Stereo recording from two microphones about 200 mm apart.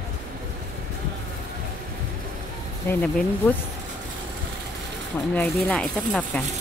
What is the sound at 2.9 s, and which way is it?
Speech, 5° left (ahead or behind).